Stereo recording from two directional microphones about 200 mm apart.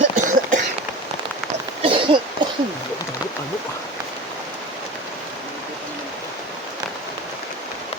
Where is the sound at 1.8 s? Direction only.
25° right (ahead or behind).